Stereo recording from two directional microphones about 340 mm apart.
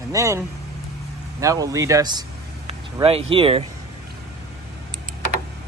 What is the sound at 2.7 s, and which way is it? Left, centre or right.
Vehicle, centre.